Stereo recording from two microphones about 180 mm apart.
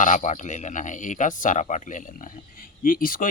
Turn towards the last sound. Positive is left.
turn(degrees=50)  # may be behind; listen again after turning